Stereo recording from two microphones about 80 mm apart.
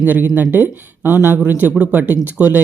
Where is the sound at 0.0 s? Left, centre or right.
Right.